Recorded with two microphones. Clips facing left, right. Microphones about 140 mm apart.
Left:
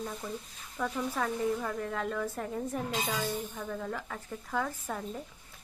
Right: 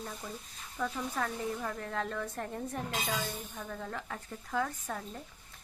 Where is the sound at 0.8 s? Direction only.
Centre (ahead or behind).